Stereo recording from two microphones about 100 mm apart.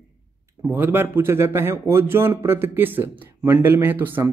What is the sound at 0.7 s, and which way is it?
Speech, 20° right (ahead or behind).